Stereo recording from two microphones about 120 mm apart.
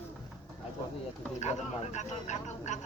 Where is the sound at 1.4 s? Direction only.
75° left (ahead or behind).